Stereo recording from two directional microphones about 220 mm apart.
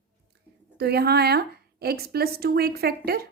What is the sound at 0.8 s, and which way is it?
A woman's voice, 45° right (ahead or behind).